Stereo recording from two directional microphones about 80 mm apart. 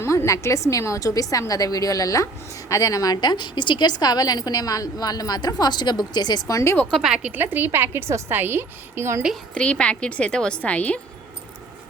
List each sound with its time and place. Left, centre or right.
0.0 s a woman's voice: left
6.5 s a woman's voice: left
6.9 s speech: centre
7.3 s a woman's voice: right
9.6 s a woman's voice: centre